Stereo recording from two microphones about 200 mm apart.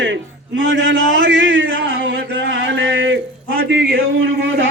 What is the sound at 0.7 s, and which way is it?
Speech, 70° right (ahead or behind).